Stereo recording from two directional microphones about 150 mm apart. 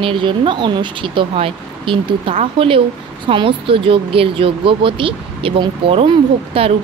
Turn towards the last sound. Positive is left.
turn(degrees=-40)  # may be behind; listen again after turning